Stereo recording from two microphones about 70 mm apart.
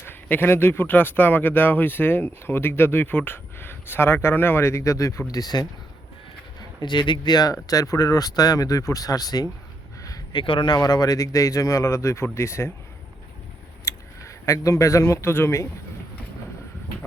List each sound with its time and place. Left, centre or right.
0.0 s speech: left
5.3 s speech: left
6.6 s speech: left
7.5 s speech: left
10.3 s speech: left
13.8 s speech: left